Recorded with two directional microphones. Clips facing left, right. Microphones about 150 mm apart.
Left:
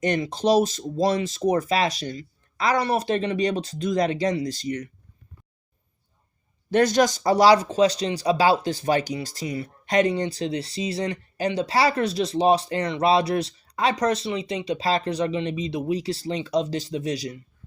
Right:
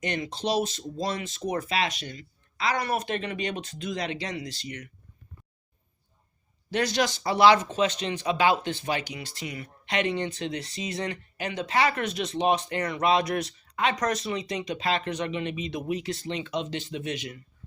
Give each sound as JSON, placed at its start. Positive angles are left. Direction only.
{"t": 0.0, "sound": "speech", "side_deg": 45}
{"t": 6.7, "sound": "speech", "side_deg": 50}